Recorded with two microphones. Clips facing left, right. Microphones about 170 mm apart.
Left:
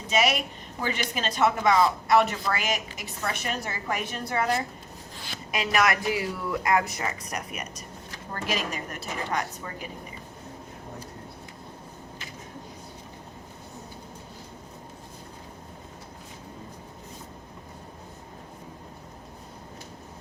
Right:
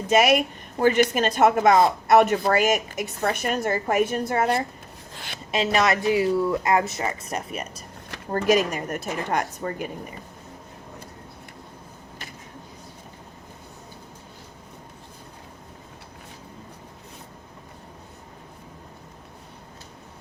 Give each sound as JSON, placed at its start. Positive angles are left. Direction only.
{"t": 0.1, "sound": "a woman's voice", "side_deg": -50}
{"t": 5.5, "sound": "speech", "side_deg": -25}
{"t": 8.3, "sound": "a woman's voice", "side_deg": -45}